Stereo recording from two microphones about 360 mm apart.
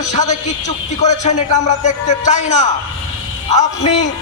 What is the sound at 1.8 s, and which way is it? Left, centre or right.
A man's voice, centre.